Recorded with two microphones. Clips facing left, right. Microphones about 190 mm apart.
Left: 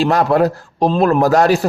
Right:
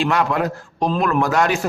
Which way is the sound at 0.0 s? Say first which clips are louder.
Left 6 dB; 40° left (ahead or behind).